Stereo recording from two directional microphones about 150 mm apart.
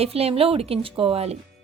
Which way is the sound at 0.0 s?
40° right (ahead or behind).